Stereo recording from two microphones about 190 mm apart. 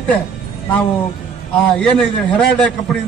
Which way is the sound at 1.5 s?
5° left (ahead or behind).